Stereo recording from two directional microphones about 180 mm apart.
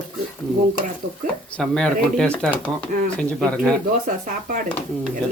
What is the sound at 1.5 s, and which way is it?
Speech, 5° left (ahead or behind).